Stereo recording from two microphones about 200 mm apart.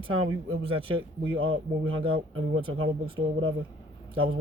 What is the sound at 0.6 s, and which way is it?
Speech, 25° right (ahead or behind).